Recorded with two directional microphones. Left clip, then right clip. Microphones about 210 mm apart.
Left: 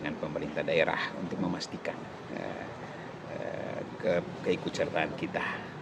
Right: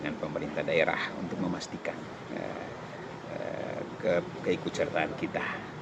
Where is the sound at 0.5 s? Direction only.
5° left (ahead or behind).